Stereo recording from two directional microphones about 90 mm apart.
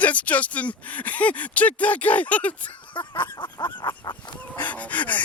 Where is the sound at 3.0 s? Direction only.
60° left (ahead or behind).